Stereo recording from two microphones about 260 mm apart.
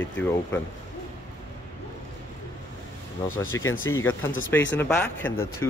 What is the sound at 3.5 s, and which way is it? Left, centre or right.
Speech, centre.